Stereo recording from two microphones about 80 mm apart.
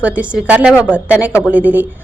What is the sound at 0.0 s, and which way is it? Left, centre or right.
A woman's voice, centre.